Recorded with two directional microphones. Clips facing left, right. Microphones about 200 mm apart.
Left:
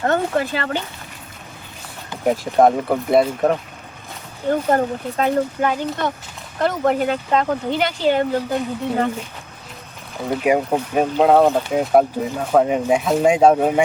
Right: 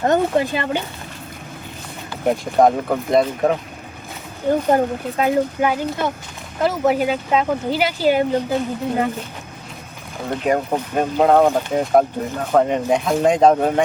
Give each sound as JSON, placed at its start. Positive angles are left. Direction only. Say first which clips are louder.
{"t": 0.0, "sound": "speech", "louder": "right 2 dB", "side_deg": -15}
{"t": 2.2, "sound": "speech", "louder": "even", "side_deg": 5}
{"t": 4.7, "sound": "speech", "louder": "right 1 dB", "side_deg": -10}
{"t": 10.2, "sound": "speech", "louder": "left 2 dB", "side_deg": 10}